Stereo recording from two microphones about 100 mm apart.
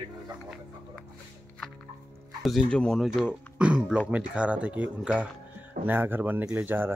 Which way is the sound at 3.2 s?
10° right (ahead or behind).